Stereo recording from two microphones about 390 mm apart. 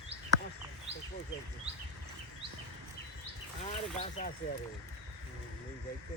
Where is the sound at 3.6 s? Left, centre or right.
Centre.